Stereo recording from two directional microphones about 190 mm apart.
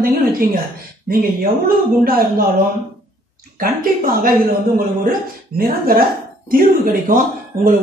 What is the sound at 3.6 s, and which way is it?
Speech, 50° right (ahead or behind).